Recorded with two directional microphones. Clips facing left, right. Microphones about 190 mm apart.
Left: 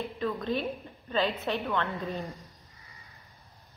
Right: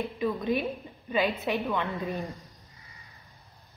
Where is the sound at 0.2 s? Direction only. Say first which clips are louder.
Right 2 dB; 10° right (ahead or behind).